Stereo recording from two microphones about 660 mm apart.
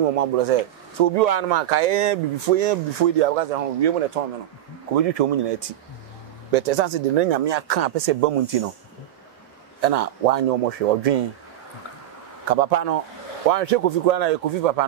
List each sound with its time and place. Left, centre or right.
0.0 s speech: right
1.1 s speech: right
6.5 s speech: right
9.8 s speech: right
12.5 s speech: right
13.5 s speech: right